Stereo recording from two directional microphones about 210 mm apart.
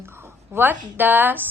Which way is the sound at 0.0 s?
10° right (ahead or behind).